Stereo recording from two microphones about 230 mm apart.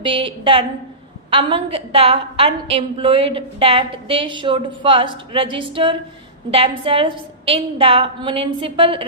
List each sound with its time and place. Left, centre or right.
0.0 s a woman's voice: right